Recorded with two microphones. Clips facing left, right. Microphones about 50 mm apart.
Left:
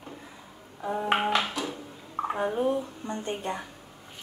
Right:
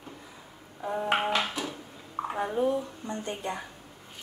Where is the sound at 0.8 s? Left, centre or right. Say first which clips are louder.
Left 1 dB; centre.